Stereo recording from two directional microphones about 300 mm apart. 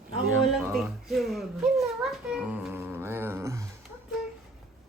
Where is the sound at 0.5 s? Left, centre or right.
Centre.